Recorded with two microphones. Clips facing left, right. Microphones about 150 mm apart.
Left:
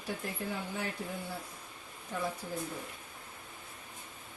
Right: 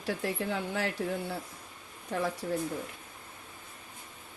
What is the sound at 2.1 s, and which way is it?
Speech, 75° right (ahead or behind).